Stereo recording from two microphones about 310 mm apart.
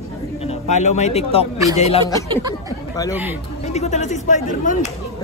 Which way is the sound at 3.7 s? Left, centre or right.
Left.